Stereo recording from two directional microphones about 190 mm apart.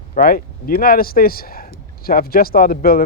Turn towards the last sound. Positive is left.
turn(degrees=50)  # may be behind; listen again after turning